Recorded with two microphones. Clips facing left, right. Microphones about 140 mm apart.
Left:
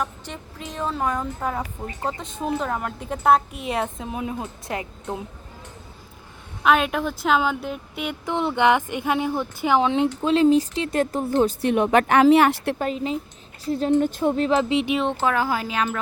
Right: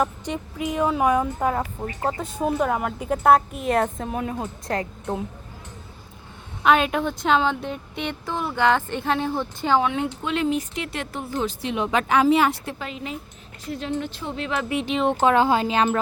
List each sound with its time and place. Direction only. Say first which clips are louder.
0.0 s speech: right 5 dB; 10° right (ahead or behind)
4.1 s speech: right 1 dB; 15° left (ahead or behind)
6.6 s speech: right 1 dB; centre (ahead or behind)
8.2 s speech: left 3 dB; 20° left (ahead or behind)
9.8 s speech: left 4 dB; 25° left (ahead or behind)
11.6 s a woman's voice: left 5 dB; 55° left (ahead or behind)
12.8 s speech: left 7 dB; 35° left (ahead or behind)
14.6 s speech: left 4 dB; 20° left (ahead or behind)
15.2 s speech: right 4 dB; 25° right (ahead or behind)